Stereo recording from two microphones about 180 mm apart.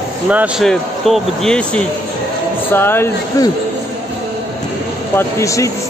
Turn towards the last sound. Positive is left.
turn(degrees=15)  # may be behind; listen again after turning